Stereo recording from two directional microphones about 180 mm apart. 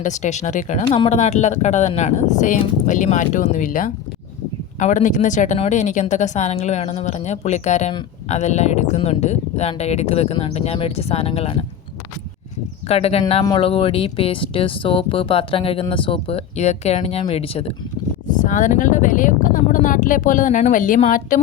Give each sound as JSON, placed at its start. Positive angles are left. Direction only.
{"t": 0.0, "sound": "speech", "side_deg": 40}
{"t": 12.9, "sound": "speech", "side_deg": 35}
{"t": 18.3, "sound": "speech", "side_deg": 45}